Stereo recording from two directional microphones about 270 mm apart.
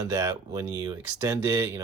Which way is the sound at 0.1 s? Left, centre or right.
Centre.